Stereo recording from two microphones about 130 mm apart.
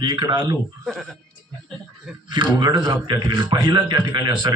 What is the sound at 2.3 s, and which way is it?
A man's voice, 35° right (ahead or behind).